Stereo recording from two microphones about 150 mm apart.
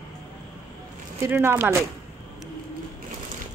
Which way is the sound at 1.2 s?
15° right (ahead or behind).